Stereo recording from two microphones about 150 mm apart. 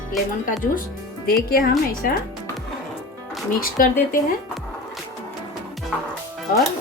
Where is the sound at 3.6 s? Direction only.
70° left (ahead or behind).